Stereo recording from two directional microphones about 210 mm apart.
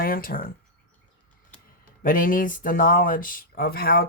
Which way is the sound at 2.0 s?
40° left (ahead or behind).